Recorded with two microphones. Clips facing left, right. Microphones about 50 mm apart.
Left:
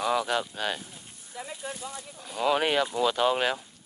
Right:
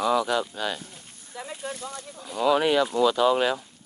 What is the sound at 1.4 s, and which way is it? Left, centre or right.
Speech, right.